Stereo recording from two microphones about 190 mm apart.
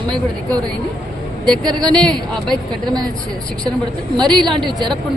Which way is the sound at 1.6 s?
20° right (ahead or behind).